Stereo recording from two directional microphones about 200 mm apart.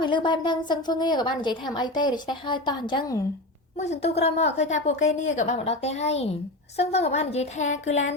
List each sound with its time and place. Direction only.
0.0 s a woman's voice: 25° left (ahead or behind)
3.8 s a woman's voice: 35° left (ahead or behind)